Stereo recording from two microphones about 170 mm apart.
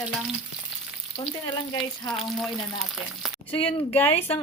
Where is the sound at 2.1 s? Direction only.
Centre (ahead or behind).